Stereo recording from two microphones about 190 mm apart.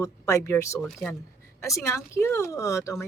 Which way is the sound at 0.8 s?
Centre (ahead or behind).